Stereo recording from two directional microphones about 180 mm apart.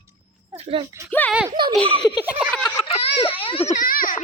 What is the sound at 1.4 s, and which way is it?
Speech, 25° right (ahead or behind).